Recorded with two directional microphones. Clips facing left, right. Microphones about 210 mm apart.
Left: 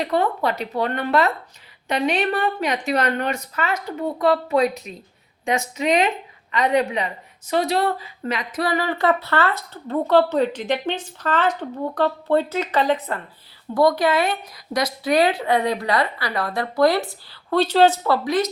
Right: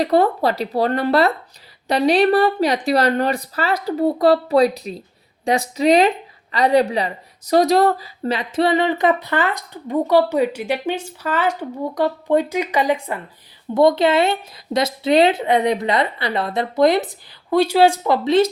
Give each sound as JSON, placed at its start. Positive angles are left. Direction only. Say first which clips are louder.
{"t": 0.0, "sound": "a woman's voice", "louder": "right 5 dB", "side_deg": -35}
{"t": 13.7, "sound": "a woman's voice", "louder": "right 3 dB", "side_deg": -25}